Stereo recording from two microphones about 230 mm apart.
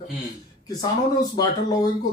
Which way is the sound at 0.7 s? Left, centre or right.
Centre.